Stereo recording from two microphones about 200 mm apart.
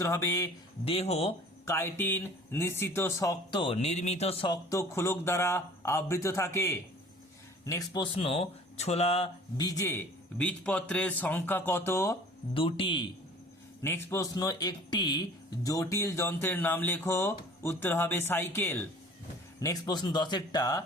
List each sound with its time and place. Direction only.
0.0 s speech: 15° left (ahead or behind)
0.9 s speech: 30° left (ahead or behind)
1.6 s speech: 15° left (ahead or behind); by 9.6 s 30° left (ahead or behind)
9.6 s speech: 15° left (ahead or behind)
12.5 s speech: 25° left (ahead or behind)
13.8 s speech: 15° left (ahead or behind)